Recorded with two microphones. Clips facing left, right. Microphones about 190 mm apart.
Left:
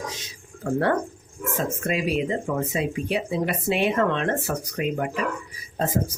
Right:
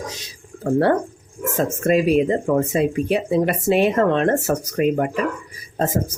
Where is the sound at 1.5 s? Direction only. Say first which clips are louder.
Right 8 dB; 45° right (ahead or behind).